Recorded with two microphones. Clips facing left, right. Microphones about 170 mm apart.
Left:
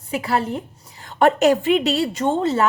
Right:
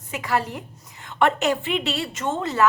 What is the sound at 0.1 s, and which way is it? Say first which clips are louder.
A woman's voice: left 3 dB; 30° left (ahead or behind).